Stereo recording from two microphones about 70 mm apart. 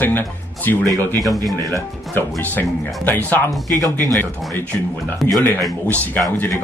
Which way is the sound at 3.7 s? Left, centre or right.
Right.